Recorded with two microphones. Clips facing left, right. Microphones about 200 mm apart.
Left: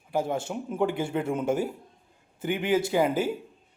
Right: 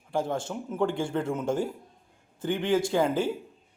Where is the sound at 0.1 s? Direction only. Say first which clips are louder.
Left 1 dB; 10° left (ahead or behind).